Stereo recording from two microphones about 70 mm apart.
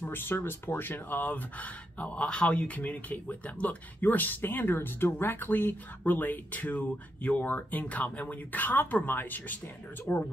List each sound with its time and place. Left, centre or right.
0.0 s speech: left
10.1 s speech: left